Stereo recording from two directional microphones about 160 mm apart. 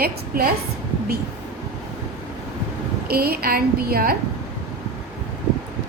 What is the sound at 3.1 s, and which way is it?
A woman's voice, 75° right (ahead or behind).